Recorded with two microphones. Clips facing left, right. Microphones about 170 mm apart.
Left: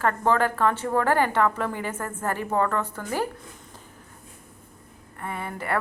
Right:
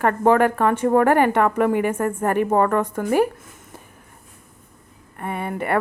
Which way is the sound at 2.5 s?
50° right (ahead or behind).